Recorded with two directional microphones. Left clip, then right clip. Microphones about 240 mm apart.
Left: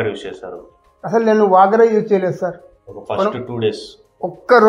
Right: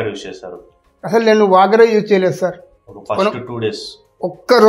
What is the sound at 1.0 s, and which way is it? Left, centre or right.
Speech, right.